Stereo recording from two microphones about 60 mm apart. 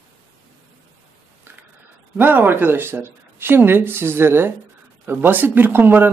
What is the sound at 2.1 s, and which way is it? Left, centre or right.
Speech, right.